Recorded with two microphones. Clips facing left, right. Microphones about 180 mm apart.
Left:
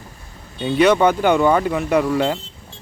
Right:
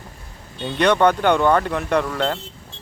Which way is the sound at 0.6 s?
5° left (ahead or behind).